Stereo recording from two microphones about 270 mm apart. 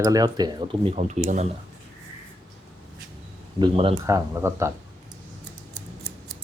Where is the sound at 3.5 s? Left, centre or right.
Centre.